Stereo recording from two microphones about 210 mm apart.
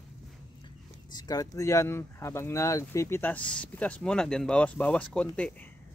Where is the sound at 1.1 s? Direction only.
20° left (ahead or behind).